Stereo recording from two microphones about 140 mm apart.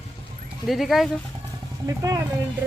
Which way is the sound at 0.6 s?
Centre (ahead or behind).